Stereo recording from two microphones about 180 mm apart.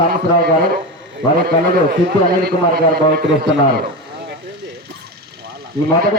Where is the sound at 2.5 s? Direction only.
60° right (ahead or behind).